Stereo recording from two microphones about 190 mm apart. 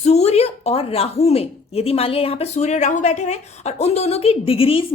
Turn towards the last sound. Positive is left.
turn(degrees=30)  # may be behind; listen again after turning